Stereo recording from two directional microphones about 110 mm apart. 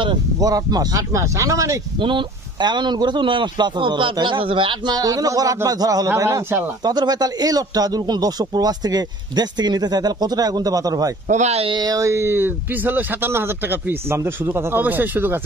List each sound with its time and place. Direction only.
0.0 s speech: 45° right (ahead or behind)
0.5 s speech: 35° right (ahead or behind)
2.0 s speech: 50° right (ahead or behind)
4.9 s speech: 30° right (ahead or behind)
11.2 s speech: 90° right
11.7 s speech: 35° right (ahead or behind); by 15.4 s 20° right (ahead or behind)